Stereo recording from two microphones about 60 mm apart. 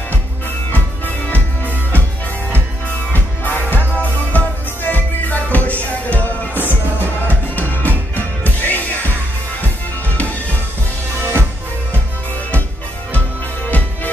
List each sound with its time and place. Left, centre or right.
0.7 s music: left
3.1 s music: left
13.7 s music: left